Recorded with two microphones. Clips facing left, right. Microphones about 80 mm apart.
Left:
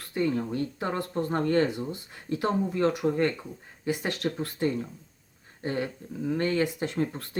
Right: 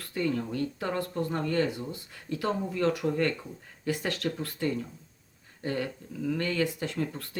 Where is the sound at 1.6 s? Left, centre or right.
Left.